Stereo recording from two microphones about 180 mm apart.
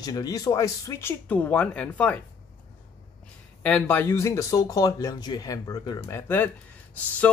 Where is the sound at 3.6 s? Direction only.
10° left (ahead or behind).